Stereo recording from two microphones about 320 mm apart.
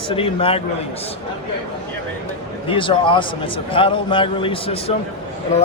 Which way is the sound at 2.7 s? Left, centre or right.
Centre.